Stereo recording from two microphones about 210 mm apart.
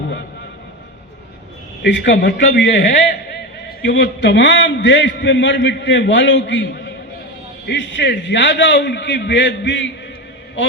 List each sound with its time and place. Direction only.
1.8 s a man's voice: 55° left (ahead or behind)
2.8 s a man's voice: 40° left (ahead or behind)
3.8 s a man's voice: 55° left (ahead or behind)